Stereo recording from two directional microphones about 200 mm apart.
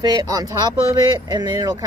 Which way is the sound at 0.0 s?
20° right (ahead or behind).